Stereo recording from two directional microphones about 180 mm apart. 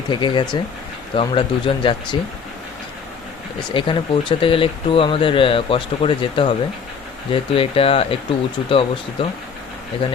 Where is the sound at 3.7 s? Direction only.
25° left (ahead or behind).